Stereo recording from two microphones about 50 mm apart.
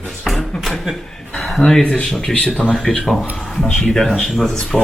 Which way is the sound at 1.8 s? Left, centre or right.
Centre.